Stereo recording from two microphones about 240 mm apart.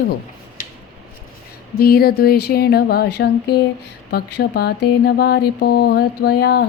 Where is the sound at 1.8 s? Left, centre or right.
Left.